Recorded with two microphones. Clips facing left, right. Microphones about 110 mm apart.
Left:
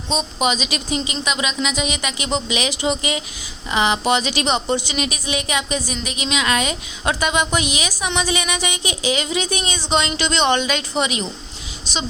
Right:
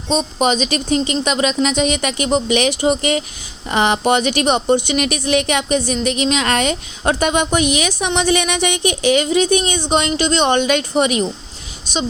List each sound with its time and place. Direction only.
0.1 s a woman's voice: 45° right (ahead or behind)
7.0 s a woman's voice: 45° right (ahead or behind)